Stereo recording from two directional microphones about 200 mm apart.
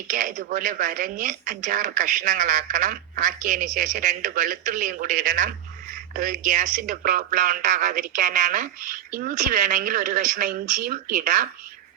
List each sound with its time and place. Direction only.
0.1 s speech: 40° right (ahead or behind)